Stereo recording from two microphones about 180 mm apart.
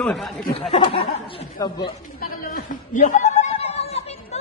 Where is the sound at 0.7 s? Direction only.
30° left (ahead or behind).